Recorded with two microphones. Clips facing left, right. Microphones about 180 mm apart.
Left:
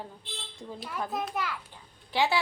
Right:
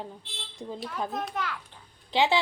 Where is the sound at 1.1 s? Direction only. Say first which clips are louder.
Even; 5° left (ahead or behind).